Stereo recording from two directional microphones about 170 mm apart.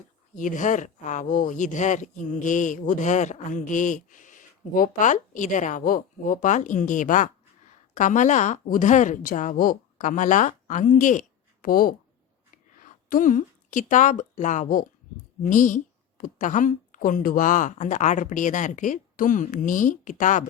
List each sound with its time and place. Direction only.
0.3 s speech: 50° left (ahead or behind)